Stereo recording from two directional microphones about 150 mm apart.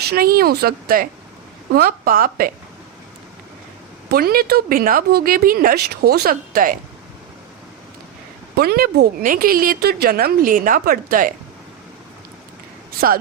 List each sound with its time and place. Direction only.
0.0 s a woman's voice: 85° right
4.1 s speech: 85° right
8.5 s a woman's voice: 90° right; by 11.3 s 65° right (ahead or behind)